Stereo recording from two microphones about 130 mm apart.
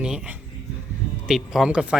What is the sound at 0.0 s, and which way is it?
Speech, 5° right (ahead or behind).